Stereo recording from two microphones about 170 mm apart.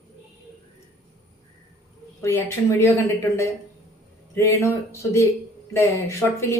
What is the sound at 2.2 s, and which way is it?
Speech, 15° left (ahead or behind).